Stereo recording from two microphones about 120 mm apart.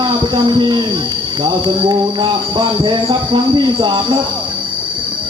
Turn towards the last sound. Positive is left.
turn(degrees=-40)  # may be behind; listen again after turning